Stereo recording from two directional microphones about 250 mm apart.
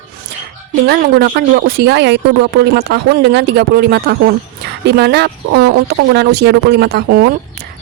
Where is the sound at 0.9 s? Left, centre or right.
Right.